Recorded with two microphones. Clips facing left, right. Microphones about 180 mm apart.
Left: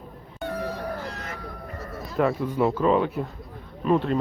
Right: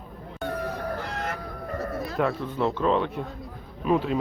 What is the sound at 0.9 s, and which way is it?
Music, 60° right (ahead or behind).